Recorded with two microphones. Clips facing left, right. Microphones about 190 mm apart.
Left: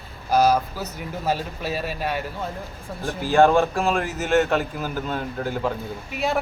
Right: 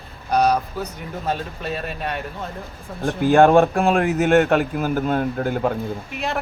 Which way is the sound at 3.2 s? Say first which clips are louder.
Right 4 dB; 55° right (ahead or behind).